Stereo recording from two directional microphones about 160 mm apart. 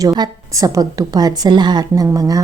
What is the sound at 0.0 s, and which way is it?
A woman's voice, 25° right (ahead or behind).